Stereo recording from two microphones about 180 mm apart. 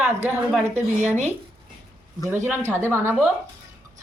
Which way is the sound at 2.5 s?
15° right (ahead or behind).